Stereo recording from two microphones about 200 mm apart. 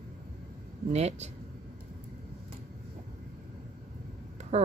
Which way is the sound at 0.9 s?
35° right (ahead or behind).